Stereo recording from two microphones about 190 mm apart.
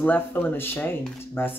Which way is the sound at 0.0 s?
10° left (ahead or behind).